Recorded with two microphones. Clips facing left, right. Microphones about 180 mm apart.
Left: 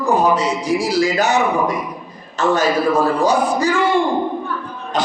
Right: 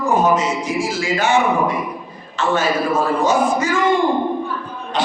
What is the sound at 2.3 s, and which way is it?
Speech, 40° left (ahead or behind).